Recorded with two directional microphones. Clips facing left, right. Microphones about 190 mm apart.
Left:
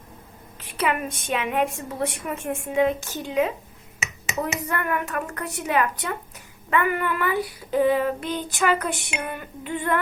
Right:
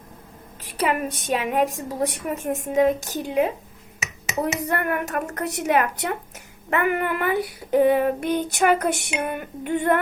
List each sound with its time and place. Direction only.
0.7 s a woman's voice: 40° right (ahead or behind)
6.7 s child singing: 50° right (ahead or behind)